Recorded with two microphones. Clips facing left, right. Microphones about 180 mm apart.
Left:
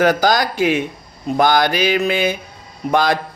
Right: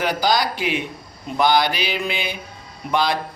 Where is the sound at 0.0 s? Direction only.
45° left (ahead or behind).